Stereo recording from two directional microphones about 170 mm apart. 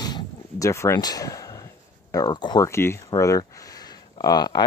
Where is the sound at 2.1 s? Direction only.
25° left (ahead or behind).